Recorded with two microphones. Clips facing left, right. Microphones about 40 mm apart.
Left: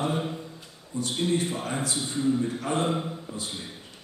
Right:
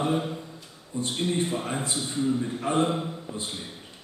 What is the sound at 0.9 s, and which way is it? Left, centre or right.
A man's voice, right.